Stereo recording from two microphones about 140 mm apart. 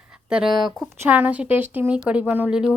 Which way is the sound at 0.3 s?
5° right (ahead or behind).